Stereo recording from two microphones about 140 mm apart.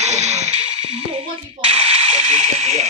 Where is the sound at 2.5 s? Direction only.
55° right (ahead or behind).